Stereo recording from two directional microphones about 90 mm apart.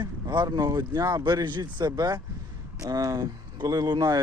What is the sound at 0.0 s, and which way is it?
Speech, 55° right (ahead or behind).